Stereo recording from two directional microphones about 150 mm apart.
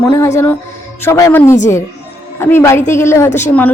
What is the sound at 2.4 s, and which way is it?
Speech, 15° left (ahead or behind).